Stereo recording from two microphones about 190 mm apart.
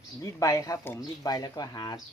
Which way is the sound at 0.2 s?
15° left (ahead or behind).